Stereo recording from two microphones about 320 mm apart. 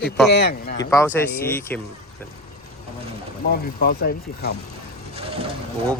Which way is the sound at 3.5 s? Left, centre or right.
Left.